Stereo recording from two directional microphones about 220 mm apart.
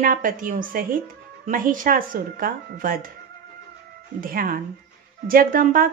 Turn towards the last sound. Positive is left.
turn(degrees=-40)  # may be behind; listen again after turning